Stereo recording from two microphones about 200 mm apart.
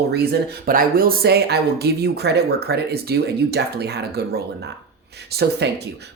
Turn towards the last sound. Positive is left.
turn(degrees=-55)  # may be behind; listen again after turning